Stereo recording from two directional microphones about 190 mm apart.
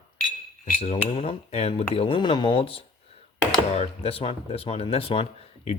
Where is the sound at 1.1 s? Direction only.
30° left (ahead or behind).